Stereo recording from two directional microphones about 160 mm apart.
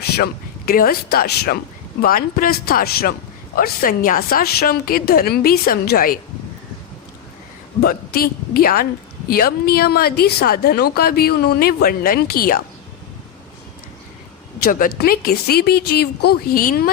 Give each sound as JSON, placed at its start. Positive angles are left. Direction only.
{"t": 0.2, "sound": "a man's voice", "side_deg": 70}
{"t": 7.8, "sound": "a man's voice", "side_deg": 70}
{"t": 14.6, "sound": "a man's voice", "side_deg": 65}